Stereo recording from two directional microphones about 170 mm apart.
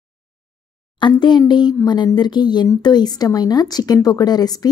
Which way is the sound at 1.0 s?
25° left (ahead or behind).